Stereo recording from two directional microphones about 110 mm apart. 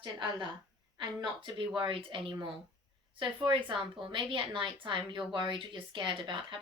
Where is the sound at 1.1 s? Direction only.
45° right (ahead or behind).